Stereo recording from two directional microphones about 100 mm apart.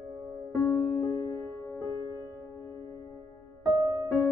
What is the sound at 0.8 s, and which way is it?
Music, 20° left (ahead or behind).